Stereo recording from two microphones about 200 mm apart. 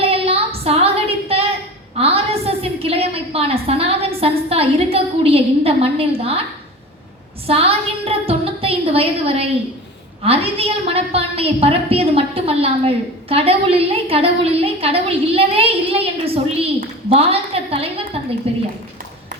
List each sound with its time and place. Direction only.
0.0 s a sound: 30° right (ahead or behind)
2.0 s a woman's voice: 30° right (ahead or behind)
7.4 s a woman's voice: 30° right (ahead or behind)